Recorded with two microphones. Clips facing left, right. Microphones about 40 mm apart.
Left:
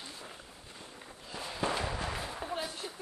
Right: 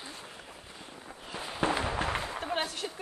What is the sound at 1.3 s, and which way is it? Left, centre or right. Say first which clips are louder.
Firecracker: right 4 dB; right.